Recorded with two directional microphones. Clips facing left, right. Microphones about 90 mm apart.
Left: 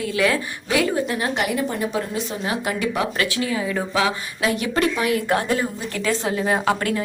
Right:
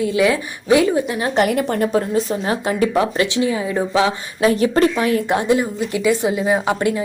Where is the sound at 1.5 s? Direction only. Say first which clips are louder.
Right 5 dB; 60° right (ahead or behind).